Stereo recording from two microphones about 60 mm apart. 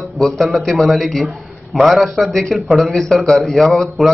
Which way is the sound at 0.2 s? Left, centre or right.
Centre.